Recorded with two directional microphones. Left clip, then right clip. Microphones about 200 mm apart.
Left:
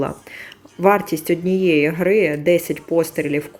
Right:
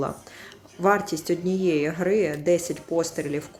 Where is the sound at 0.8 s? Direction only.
20° left (ahead or behind).